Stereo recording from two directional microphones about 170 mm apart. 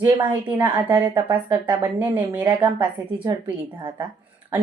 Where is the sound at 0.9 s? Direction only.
10° right (ahead or behind).